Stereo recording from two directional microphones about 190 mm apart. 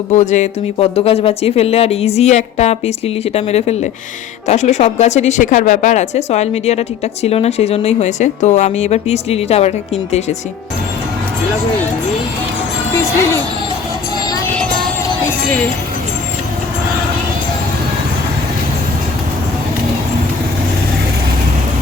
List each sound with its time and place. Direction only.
0.1 s speech: 40° left (ahead or behind)